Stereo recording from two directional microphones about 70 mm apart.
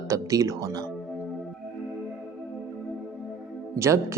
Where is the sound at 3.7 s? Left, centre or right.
Right.